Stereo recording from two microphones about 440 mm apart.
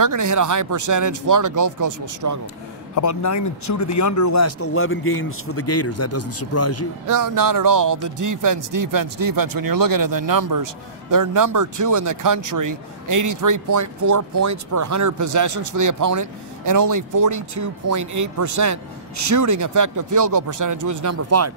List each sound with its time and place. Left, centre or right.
0.0 s speech: right
3.0 s speech: left
7.1 s speech: right